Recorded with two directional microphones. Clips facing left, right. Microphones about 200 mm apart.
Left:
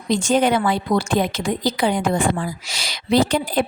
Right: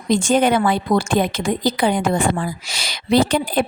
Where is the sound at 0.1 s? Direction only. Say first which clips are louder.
Right 2 dB; 50° right (ahead or behind).